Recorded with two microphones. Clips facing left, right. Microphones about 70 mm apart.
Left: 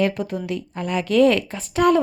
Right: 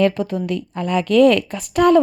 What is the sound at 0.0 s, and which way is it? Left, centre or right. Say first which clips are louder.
A woman's voice: right 4 dB; centre.